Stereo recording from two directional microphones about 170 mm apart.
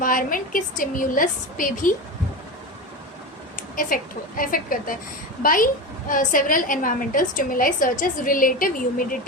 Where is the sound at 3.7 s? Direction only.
55° left (ahead or behind).